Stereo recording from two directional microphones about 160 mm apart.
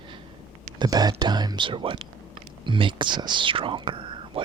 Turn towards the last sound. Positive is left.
turn(degrees=-30)  # may be behind; listen again after turning